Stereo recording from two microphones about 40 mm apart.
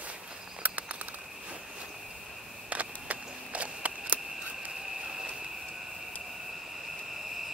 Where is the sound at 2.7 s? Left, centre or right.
Right.